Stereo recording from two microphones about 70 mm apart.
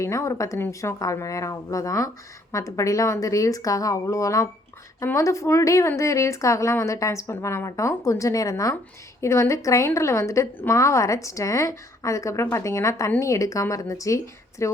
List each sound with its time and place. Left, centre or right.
0.0 s a woman's voice: left
9.2 s a woman's voice: left